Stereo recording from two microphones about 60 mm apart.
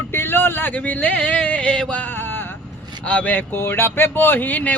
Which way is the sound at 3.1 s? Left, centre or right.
Left.